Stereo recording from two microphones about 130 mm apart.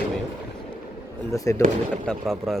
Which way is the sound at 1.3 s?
25° left (ahead or behind).